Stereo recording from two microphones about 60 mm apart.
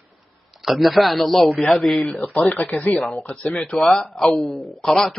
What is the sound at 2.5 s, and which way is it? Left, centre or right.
Speech, centre.